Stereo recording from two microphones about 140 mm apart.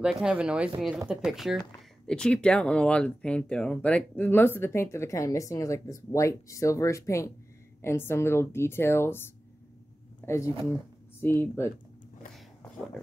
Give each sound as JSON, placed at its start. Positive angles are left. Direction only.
{"t": 0.0, "sound": "speech", "side_deg": -5}
{"t": 10.2, "sound": "speech", "side_deg": 20}